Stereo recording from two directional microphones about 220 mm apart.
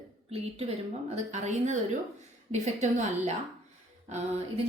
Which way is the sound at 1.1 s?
30° right (ahead or behind).